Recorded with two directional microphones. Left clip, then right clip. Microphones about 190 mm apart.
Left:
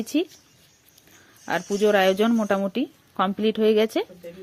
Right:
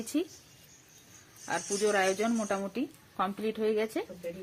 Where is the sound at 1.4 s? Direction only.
50° left (ahead or behind).